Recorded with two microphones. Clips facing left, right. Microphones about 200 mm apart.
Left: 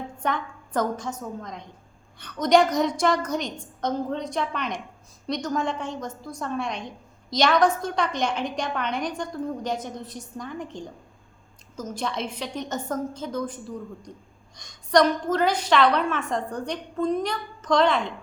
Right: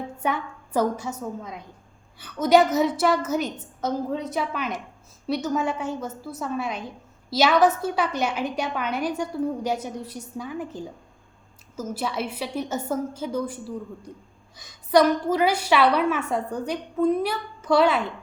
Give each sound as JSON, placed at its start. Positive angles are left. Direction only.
{"t": 0.2, "sound": "a woman's voice", "side_deg": -10}